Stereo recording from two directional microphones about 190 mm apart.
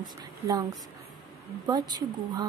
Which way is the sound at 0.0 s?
20° right (ahead or behind).